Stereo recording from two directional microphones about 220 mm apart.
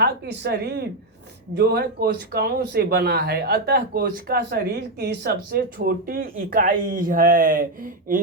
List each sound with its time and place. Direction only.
0.0 s speech: 45° right (ahead or behind)